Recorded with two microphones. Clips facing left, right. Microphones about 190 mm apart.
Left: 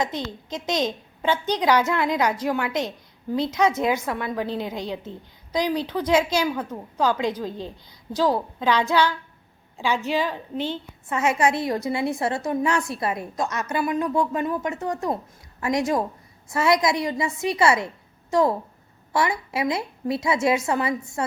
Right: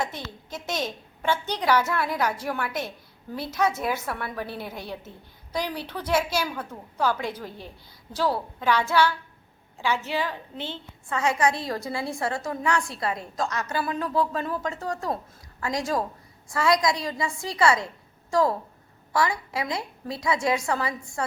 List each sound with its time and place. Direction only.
0.0 s a woman's voice: 20° left (ahead or behind)